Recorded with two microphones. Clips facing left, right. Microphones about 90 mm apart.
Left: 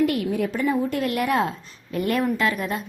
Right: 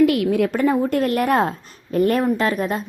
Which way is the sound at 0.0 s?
90° right.